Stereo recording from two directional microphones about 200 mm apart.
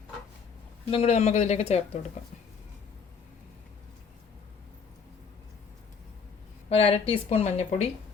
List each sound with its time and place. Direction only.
0.9 s speech: 30° left (ahead or behind)
6.7 s speech: 30° left (ahead or behind)